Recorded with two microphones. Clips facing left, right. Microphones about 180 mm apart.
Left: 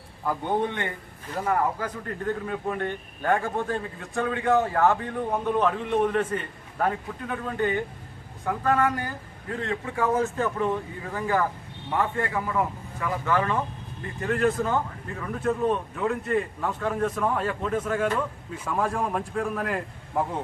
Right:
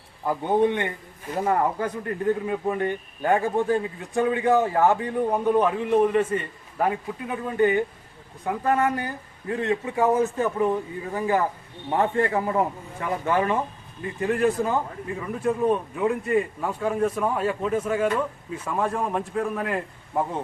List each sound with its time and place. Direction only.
0.3 s a man's voice: 15° right (ahead or behind)
1.4 s speech: 25° right (ahead or behind)
2.5 s a man's voice: 10° right (ahead or behind)
11.9 s a man's voice: 30° right (ahead or behind); by 20.4 s centre (ahead or behind)